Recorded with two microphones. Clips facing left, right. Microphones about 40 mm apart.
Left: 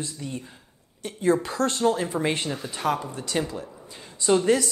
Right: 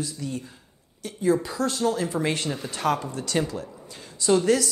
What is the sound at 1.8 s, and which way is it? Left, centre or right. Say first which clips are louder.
A woman's voice: left 1 dB; left.